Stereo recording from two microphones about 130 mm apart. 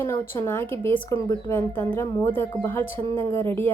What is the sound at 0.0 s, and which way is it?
Speech, 20° left (ahead or behind).